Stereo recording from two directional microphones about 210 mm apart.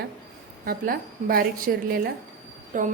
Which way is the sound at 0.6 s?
45° right (ahead or behind).